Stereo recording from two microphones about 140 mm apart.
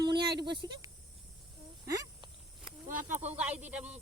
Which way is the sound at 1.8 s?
25° right (ahead or behind).